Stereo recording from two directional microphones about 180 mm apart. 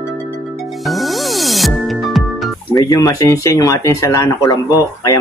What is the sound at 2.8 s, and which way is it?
Speech, 20° left (ahead or behind).